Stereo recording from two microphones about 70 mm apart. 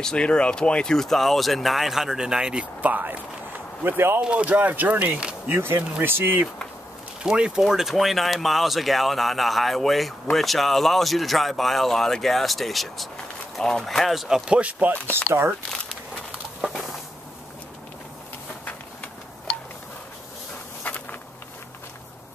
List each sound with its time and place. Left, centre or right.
0.0 s speech: centre; by 4.2 s right
4.2 s speech: centre
5.6 s speech: right
7.2 s speech: centre
20.8 s insect: left